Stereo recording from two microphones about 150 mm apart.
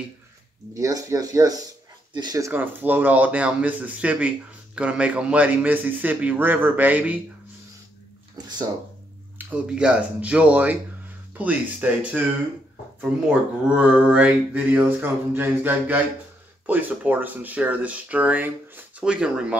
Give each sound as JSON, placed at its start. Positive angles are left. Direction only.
{"t": 0.7, "sound": "speech", "side_deg": -20}
{"t": 8.4, "sound": "a sound", "side_deg": -25}
{"t": 9.5, "sound": "speech", "side_deg": -5}
{"t": 13.3, "sound": "speech", "side_deg": -5}